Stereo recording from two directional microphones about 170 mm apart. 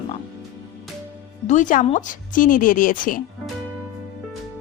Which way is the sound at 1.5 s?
45° left (ahead or behind).